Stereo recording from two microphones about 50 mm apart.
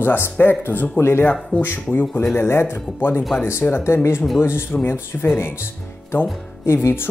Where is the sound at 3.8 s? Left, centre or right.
Left.